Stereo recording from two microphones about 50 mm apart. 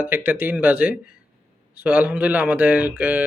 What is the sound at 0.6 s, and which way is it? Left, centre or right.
Speech, right.